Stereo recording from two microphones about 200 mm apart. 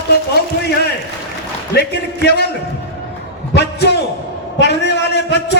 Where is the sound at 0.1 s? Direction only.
55° left (ahead or behind).